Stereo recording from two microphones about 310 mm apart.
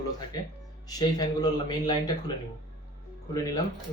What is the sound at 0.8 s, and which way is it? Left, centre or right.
Speech, centre.